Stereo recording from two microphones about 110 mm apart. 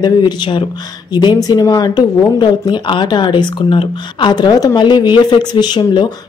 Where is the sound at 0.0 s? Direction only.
45° left (ahead or behind).